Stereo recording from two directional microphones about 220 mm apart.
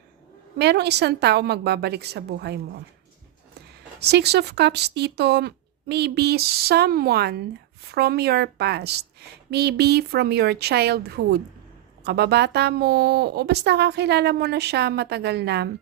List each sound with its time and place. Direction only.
0.6 s a woman's voice: 50° right (ahead or behind)
4.0 s a woman's voice: 50° right (ahead or behind)